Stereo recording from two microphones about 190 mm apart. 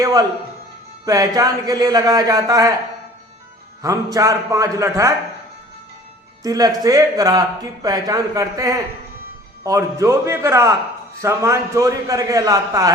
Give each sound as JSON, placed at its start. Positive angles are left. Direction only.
{"t": 0.0, "sound": "a man's voice", "side_deg": -15}
{"t": 3.8, "sound": "a man's voice", "side_deg": -20}
{"t": 6.4, "sound": "a man's voice", "side_deg": -20}